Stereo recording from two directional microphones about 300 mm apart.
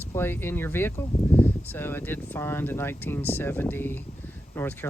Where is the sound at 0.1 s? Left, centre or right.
Centre.